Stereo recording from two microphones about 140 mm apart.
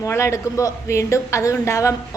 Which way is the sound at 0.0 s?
20° left (ahead or behind).